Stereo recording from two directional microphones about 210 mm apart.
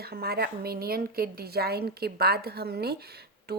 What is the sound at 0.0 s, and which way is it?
A woman's voice, 50° right (ahead or behind).